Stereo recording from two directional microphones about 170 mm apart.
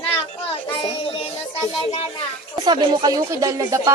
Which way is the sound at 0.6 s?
30° left (ahead or behind).